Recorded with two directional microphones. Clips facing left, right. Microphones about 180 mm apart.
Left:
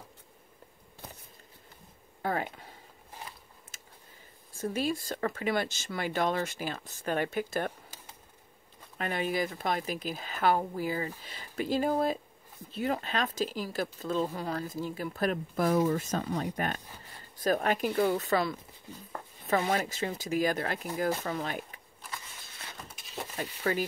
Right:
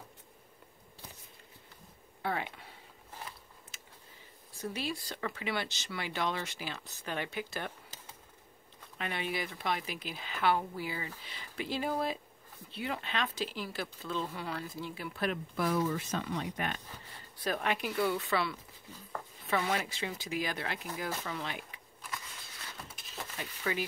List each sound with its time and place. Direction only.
2.2 s a sound: 40° left (ahead or behind)
4.5 s speech: 45° left (ahead or behind)
8.9 s speech: 45° left (ahead or behind)
23.3 s speech: 45° left (ahead or behind)